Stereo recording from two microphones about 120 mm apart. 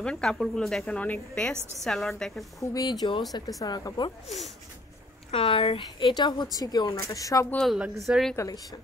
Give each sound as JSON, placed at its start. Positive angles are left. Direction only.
{"t": 0.0, "sound": "a woman's voice", "side_deg": 5}
{"t": 2.6, "sound": "speech", "side_deg": 30}
{"t": 5.3, "sound": "speech", "side_deg": 50}
{"t": 7.5, "sound": "a woman's voice", "side_deg": 0}